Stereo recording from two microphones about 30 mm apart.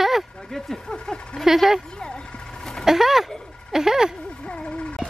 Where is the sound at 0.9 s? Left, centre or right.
Left.